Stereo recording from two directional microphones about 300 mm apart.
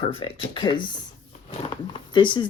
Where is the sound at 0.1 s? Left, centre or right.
Centre.